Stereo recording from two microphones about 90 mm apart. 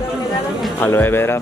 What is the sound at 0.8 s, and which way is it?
Speech, 25° left (ahead or behind).